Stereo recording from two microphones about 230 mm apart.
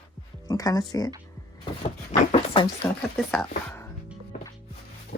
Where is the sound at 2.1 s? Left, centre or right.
Left.